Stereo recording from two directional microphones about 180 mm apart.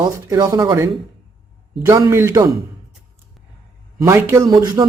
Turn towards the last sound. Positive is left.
turn(degrees=-20)  # may be behind; listen again after turning